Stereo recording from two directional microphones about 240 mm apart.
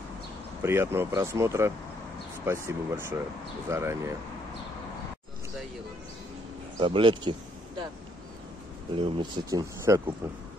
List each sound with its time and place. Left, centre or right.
0.6 s speech: centre
6.8 s speech: right
8.9 s speech: centre